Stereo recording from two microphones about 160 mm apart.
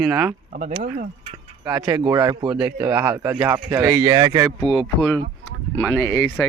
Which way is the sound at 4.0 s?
25° right (ahead or behind).